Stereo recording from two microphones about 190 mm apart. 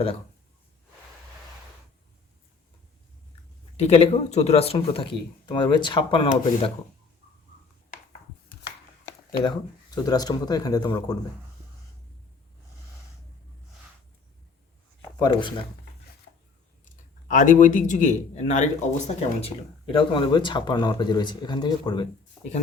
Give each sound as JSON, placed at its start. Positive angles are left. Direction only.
{"t": 3.8, "sound": "speech", "side_deg": 35}
{"t": 9.4, "sound": "speech", "side_deg": 20}
{"t": 15.2, "sound": "speech", "side_deg": 25}
{"t": 16.8, "sound": "speech", "side_deg": 40}